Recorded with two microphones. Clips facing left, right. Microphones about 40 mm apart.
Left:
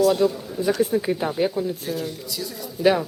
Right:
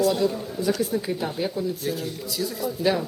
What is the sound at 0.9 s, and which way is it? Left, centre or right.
Speech, centre.